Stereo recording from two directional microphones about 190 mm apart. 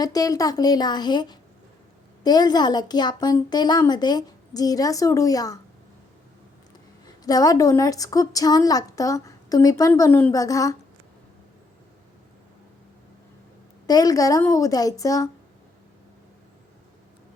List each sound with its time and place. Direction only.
0.0 s a woman's voice: 20° left (ahead or behind)
7.3 s a woman's voice: 20° left (ahead or behind)
13.8 s a woman's voice: 20° left (ahead or behind)